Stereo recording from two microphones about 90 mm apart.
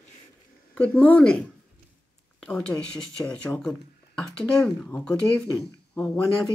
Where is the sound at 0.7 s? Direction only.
15° left (ahead or behind).